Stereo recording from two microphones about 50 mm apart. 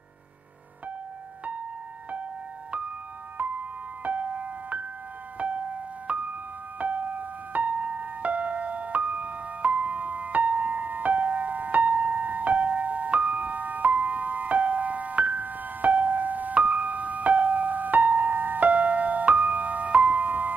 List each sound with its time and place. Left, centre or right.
4.0 s music: right